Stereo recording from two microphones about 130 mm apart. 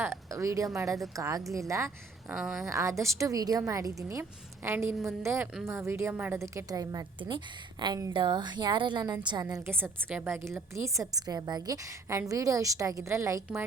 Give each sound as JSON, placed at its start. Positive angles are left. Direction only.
{"t": 0.0, "sound": "a woman's voice", "side_deg": -20}
{"t": 2.3, "sound": "speech", "side_deg": -5}
{"t": 2.6, "sound": "a woman's voice", "side_deg": -25}
{"t": 9.8, "sound": "a woman's voice", "side_deg": -15}